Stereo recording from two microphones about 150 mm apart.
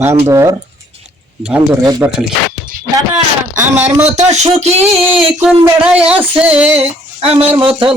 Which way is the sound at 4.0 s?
45° right (ahead or behind).